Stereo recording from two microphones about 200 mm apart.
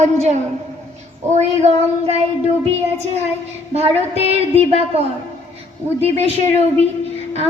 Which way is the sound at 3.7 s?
30° right (ahead or behind).